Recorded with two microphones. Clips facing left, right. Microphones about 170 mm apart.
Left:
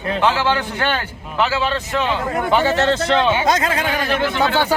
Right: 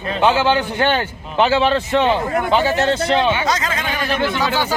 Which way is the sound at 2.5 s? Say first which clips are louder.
Left 1 dB; 15° right (ahead or behind).